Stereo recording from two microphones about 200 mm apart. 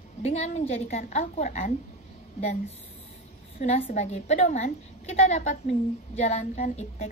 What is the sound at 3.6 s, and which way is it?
A woman's voice, 35° left (ahead or behind).